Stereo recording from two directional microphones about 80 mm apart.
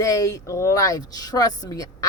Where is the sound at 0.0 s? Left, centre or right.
Left.